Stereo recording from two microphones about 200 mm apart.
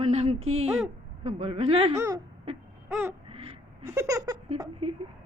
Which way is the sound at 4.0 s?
15° right (ahead or behind).